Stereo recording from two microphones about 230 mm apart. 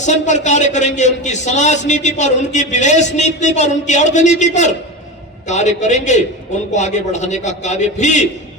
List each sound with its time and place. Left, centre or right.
0.0 s a man's voice: left